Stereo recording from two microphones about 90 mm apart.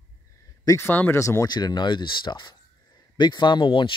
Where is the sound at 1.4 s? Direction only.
50° left (ahead or behind).